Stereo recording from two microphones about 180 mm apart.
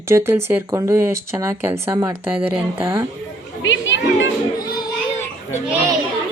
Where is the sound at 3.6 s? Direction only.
90° left.